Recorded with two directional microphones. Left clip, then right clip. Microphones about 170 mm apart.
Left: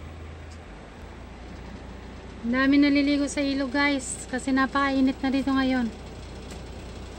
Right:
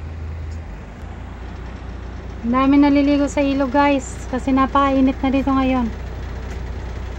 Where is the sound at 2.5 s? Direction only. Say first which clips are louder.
Right 6 dB; 15° left (ahead or behind).